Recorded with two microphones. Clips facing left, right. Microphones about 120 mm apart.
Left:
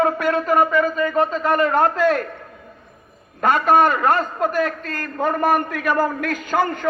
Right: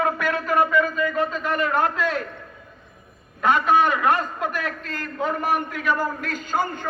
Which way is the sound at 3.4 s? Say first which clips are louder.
Left 3 dB; 45° left (ahead or behind).